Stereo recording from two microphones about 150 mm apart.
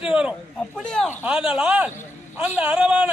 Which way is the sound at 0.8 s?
5° left (ahead or behind).